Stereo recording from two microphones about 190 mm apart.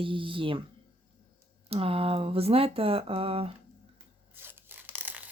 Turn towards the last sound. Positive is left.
turn(degrees=-10)  # may be behind; listen again after turning